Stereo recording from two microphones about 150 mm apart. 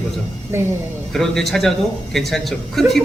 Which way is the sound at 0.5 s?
15° right (ahead or behind).